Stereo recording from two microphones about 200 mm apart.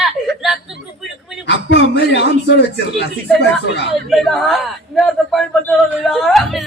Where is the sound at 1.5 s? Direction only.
60° left (ahead or behind).